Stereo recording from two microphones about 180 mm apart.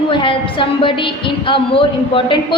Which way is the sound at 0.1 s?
30° left (ahead or behind).